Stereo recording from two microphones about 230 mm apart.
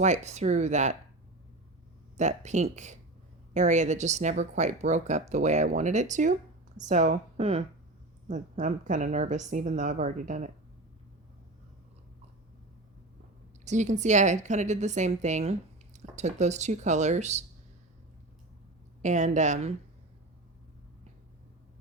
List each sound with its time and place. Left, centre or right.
0.0 s speech: right
2.1 s speech: right
13.7 s speech: right
19.0 s speech: right